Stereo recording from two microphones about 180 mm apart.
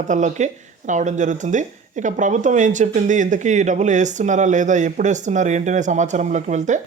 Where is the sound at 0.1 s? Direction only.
40° right (ahead or behind).